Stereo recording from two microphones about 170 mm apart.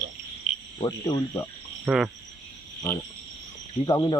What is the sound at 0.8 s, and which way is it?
Speech, 25° left (ahead or behind).